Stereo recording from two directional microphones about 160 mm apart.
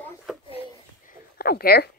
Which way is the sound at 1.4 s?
75° left (ahead or behind).